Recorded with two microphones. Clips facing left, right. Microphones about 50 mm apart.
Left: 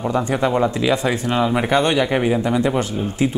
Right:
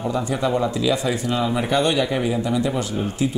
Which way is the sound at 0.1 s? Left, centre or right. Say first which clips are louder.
Left 4 dB; left.